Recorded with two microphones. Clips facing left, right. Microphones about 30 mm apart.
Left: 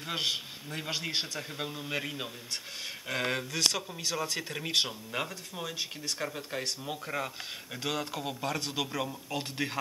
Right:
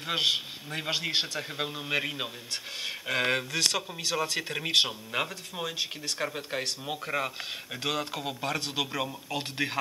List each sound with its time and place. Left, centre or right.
0.0 s speech: right